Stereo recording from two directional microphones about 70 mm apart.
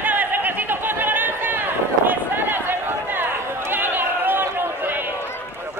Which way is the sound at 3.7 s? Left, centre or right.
Right.